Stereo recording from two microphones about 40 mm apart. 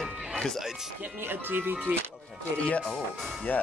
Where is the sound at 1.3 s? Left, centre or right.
Right.